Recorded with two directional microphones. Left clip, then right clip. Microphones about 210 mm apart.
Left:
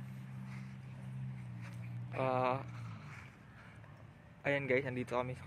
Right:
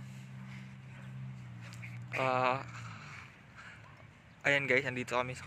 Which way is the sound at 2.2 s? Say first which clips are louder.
Right 3 dB; 5° left (ahead or behind).